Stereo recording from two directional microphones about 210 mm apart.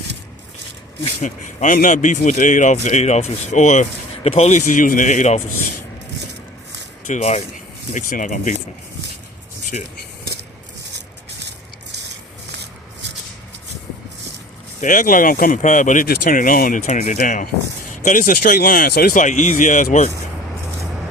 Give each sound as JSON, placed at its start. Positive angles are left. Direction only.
{"t": 1.0, "sound": "speech", "side_deg": 35}
{"t": 7.1, "sound": "speech", "side_deg": 30}
{"t": 9.7, "sound": "speech", "side_deg": 35}
{"t": 14.8, "sound": "speech", "side_deg": 40}